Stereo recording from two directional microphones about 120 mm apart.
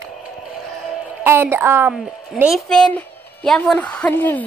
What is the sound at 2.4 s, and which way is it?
A woman's voice, 5° left (ahead or behind).